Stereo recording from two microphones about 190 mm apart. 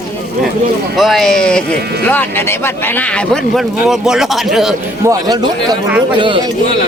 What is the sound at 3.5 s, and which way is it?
Speech, 5° right (ahead or behind).